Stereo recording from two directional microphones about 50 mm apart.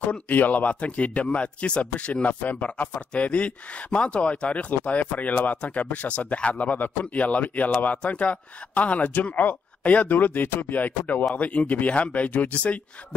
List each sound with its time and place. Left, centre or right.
0.1 s speech: left